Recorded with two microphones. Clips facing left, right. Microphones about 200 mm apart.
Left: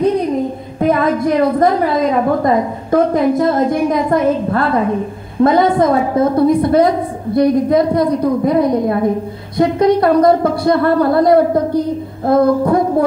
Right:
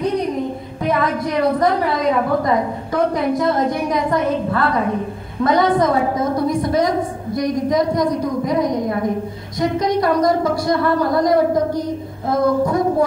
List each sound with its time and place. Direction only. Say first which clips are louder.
0.7 s a woman's voice: left 6 dB; 50° left (ahead or behind)
5.4 s a woman's voice: left 6 dB; 30° left (ahead or behind)
5.8 s speech: left 4 dB; 55° left (ahead or behind)